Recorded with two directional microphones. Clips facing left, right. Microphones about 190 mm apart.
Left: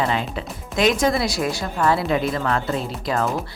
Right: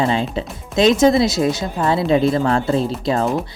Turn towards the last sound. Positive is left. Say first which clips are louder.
# right 5 dB
turn(degrees=-25)  # may be behind; listen again after turning